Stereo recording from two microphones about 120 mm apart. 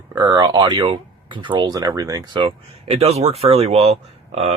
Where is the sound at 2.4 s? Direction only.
60° right (ahead or behind).